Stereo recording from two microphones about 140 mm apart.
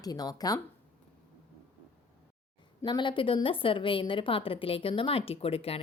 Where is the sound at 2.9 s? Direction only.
35° left (ahead or behind).